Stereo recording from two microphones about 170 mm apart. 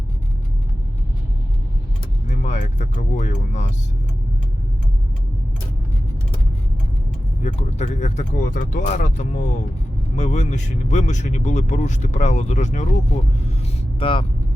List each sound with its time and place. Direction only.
2.2 s speech: 45° left (ahead or behind)
7.4 s speech: 40° left (ahead or behind)
14.0 s speech: 30° left (ahead or behind)